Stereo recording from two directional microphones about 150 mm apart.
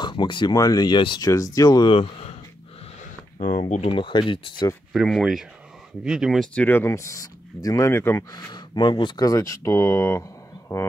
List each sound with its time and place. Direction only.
0.0 s speech: 30° left (ahead or behind)
3.0 s a sound: 60° left (ahead or behind)
3.9 s speech: 35° left (ahead or behind)
4.9 s speech: centre (ahead or behind); by 10.9 s 20° left (ahead or behind)